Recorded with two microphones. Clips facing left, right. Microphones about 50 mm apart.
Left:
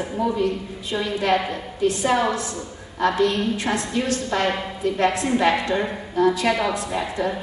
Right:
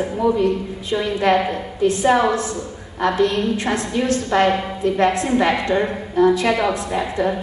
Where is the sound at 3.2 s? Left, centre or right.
Right.